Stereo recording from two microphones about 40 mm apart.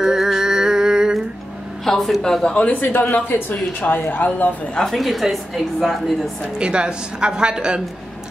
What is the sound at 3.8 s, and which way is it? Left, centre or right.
Speech, left.